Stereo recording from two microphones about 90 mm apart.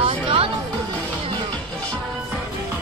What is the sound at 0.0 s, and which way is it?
Music, 70° right (ahead or behind).